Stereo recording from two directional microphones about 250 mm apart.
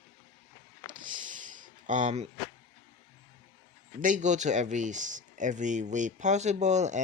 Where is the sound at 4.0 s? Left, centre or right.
Right.